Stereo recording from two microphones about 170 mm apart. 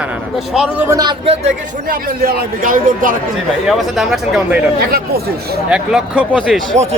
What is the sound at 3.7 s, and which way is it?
Speech, centre (ahead or behind).